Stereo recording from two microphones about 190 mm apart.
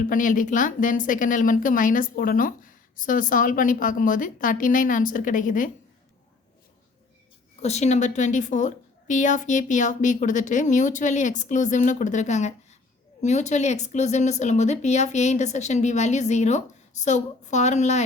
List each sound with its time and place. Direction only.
0.1 s speech: 45° left (ahead or behind)
7.6 s a woman's voice: 35° left (ahead or behind)